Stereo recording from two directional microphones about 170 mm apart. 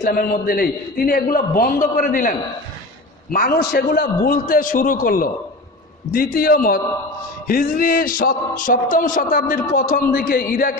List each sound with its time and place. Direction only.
0.0 s a man's voice: 60° left (ahead or behind)